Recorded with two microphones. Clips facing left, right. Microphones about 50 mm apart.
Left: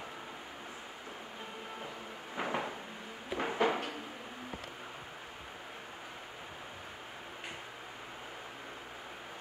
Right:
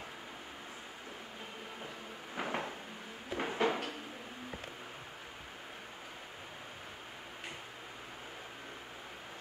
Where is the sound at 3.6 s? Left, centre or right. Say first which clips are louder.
Left 1 dB; left.